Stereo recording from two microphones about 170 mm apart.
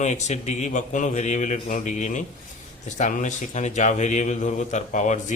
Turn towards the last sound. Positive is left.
turn(degrees=45)  # may be behind; listen again after turning